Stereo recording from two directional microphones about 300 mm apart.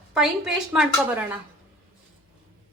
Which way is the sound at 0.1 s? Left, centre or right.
Centre.